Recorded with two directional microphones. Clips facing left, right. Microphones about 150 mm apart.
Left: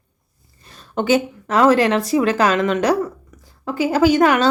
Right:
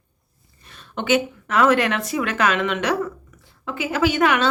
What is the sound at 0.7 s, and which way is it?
Speech, 40° left (ahead or behind).